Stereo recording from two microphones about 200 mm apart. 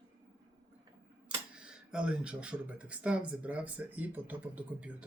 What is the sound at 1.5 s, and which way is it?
Speech, 5° right (ahead or behind).